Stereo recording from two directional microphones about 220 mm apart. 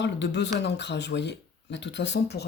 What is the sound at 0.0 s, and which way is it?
Speech, 50° left (ahead or behind).